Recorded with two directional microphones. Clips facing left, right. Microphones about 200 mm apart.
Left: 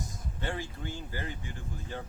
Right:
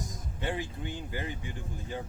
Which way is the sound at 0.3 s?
15° right (ahead or behind).